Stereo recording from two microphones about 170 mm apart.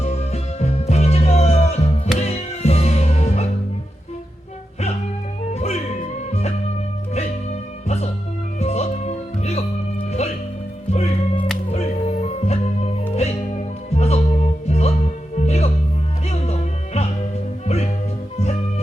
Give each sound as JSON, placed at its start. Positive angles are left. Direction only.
{"t": 0.0, "sound": "music", "side_deg": 40}
{"t": 5.5, "sound": "music", "side_deg": 40}
{"t": 7.1, "sound": "music", "side_deg": 40}